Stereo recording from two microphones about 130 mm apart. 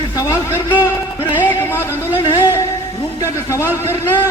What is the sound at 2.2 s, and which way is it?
Music, 35° left (ahead or behind).